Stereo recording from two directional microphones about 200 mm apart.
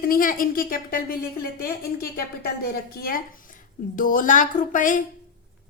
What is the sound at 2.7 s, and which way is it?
A woman's voice, 50° left (ahead or behind).